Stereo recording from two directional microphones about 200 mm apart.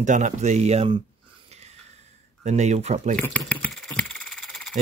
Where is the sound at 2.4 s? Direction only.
35° right (ahead or behind).